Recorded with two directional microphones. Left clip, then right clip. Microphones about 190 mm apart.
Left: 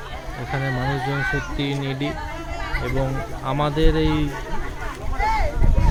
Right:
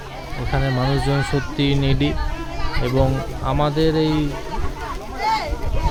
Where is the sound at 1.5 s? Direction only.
20° right (ahead or behind).